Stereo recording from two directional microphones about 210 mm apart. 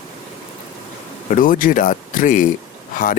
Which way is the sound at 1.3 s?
40° left (ahead or behind).